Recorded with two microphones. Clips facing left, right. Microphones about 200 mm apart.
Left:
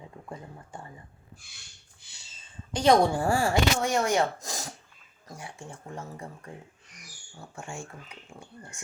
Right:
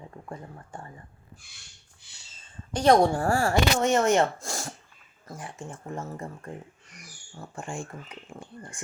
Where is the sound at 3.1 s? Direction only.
15° left (ahead or behind).